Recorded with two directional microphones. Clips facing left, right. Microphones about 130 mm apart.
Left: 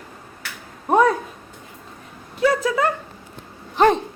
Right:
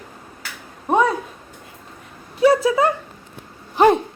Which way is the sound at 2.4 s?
15° right (ahead or behind).